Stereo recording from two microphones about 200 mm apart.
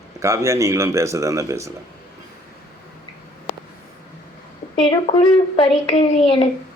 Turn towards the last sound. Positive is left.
turn(degrees=25)  # may be behind; listen again after turning